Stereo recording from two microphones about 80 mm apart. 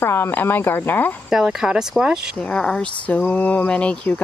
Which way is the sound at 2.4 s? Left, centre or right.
Centre.